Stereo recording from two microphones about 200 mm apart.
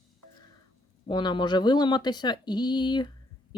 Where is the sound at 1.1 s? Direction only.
25° left (ahead or behind).